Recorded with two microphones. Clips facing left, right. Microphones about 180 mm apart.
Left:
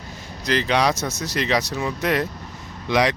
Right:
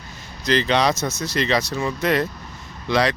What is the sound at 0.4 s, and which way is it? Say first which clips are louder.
Speech: right 1 dB; 10° left (ahead or behind).